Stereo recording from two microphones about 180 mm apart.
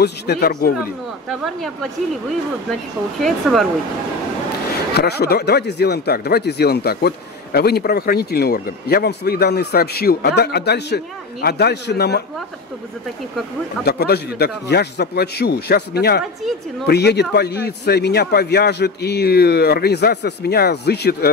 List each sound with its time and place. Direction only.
0.0 s speech: 65° left (ahead or behind)
1.4 s speech: centre (ahead or behind)
3.2 s speech: centre (ahead or behind)
4.9 s a man's voice: 65° left (ahead or behind)
13.8 s speech: 65° left (ahead or behind)